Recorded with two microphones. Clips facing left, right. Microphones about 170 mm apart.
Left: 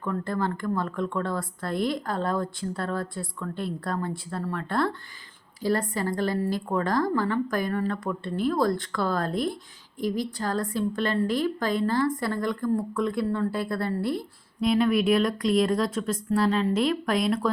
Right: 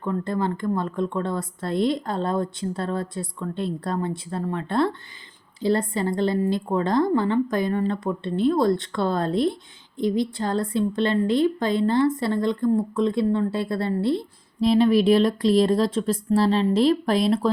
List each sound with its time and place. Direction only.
0.0 s a woman's voice: 20° right (ahead or behind)